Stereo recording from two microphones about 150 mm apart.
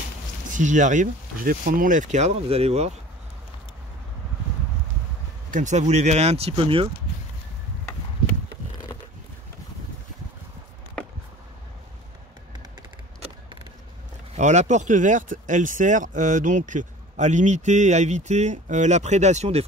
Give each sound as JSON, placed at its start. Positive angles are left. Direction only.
{"t": 0.5, "sound": "speech", "side_deg": -55}
{"t": 5.5, "sound": "speech", "side_deg": -55}
{"t": 14.3, "sound": "speech", "side_deg": -50}